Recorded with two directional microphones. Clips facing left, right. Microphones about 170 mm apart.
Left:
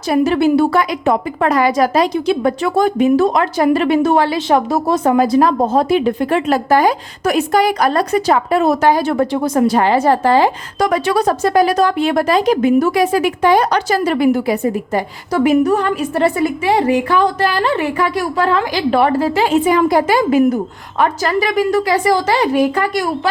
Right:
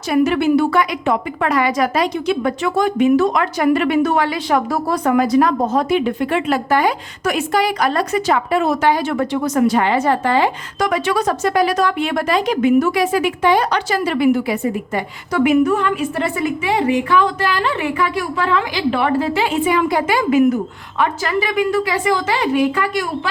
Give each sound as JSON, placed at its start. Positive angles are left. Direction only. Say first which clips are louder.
{"t": 0.1, "sound": "a woman's voice", "louder": "left 2 dB", "side_deg": 35}